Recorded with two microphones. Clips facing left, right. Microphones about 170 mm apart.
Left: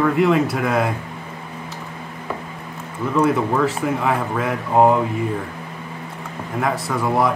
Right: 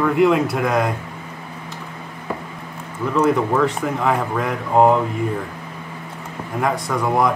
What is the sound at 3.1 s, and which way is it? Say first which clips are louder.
Speech: right 1 dB; 10° left (ahead or behind).